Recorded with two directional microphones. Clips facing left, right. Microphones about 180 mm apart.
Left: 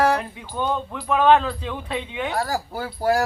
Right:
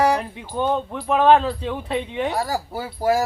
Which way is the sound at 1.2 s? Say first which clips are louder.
Right 1 dB; 30° right (ahead or behind).